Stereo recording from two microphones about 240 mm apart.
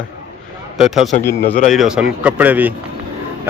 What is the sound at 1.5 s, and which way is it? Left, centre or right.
Speech, left.